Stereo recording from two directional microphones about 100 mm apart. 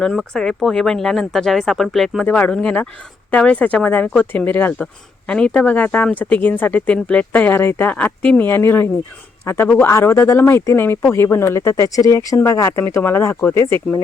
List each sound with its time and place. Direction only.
0.0 s speech: 5° left (ahead or behind)
2.2 s speech: 15° left (ahead or behind)